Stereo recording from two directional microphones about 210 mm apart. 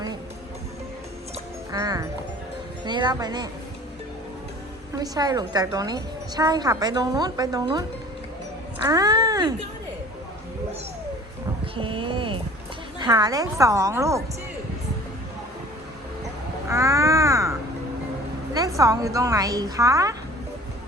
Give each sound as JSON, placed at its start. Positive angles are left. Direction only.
{"t": 1.7, "sound": "a woman's voice", "side_deg": -15}
{"t": 4.9, "sound": "a woman's voice", "side_deg": -15}
{"t": 8.9, "sound": "speech", "side_deg": -20}
{"t": 11.8, "sound": "a woman's voice", "side_deg": -25}
{"t": 16.6, "sound": "speech", "side_deg": -15}
{"t": 18.5, "sound": "a woman's voice", "side_deg": -15}